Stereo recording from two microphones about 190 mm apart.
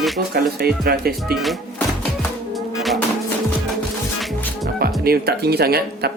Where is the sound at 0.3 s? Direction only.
55° right (ahead or behind).